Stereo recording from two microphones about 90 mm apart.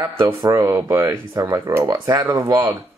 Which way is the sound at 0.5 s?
35° right (ahead or behind).